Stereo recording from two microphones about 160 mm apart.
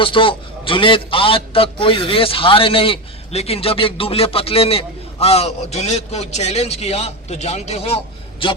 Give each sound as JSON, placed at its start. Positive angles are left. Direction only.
{"t": 0.0, "sound": "a man's voice", "side_deg": 35}